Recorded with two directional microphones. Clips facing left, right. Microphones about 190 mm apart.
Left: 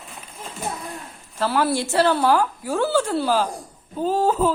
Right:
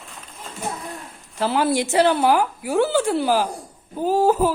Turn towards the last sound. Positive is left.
turn(degrees=-10)  # may be behind; listen again after turning